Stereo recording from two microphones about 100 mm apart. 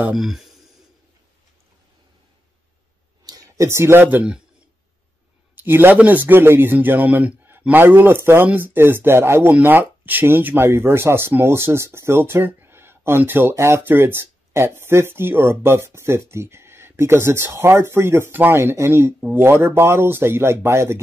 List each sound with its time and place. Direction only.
0.1 s speech: 5° right (ahead or behind)
3.3 s speech: 35° right (ahead or behind); by 4.4 s 15° right (ahead or behind)
5.6 s speech: 20° right (ahead or behind)